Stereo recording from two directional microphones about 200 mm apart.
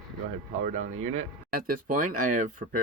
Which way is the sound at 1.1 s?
45° right (ahead or behind).